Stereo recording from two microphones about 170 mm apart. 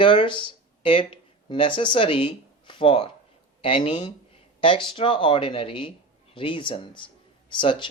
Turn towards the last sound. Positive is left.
turn(degrees=30)  # may be behind; listen again after turning